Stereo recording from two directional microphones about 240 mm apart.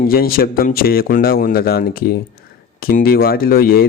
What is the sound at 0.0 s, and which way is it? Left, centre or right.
Speech, left.